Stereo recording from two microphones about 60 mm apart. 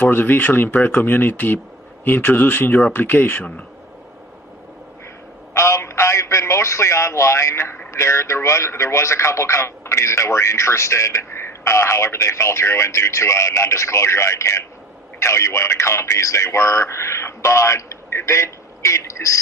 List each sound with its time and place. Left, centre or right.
0.0 s speech: left
5.5 s a man's voice: left